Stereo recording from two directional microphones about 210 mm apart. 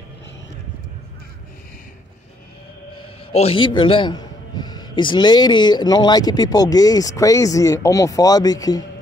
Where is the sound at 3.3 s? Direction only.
30° left (ahead or behind).